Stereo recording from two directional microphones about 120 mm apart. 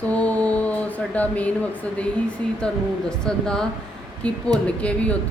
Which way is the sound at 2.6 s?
5° left (ahead or behind).